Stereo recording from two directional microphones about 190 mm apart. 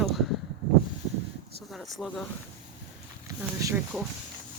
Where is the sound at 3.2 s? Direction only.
15° right (ahead or behind).